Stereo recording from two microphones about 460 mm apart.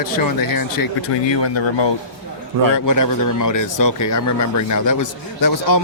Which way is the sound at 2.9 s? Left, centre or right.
Left.